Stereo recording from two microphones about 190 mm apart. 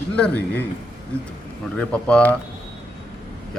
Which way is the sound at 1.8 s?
5° left (ahead or behind).